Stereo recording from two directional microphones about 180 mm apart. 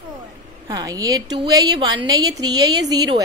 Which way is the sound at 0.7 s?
20° right (ahead or behind).